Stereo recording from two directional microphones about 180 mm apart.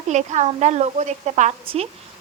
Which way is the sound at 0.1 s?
40° right (ahead or behind).